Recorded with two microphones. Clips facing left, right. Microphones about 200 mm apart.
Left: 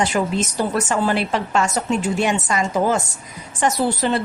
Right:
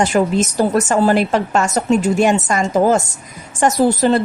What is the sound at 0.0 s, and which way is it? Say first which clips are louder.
A woman's voice: right 5 dB; 45° right (ahead or behind).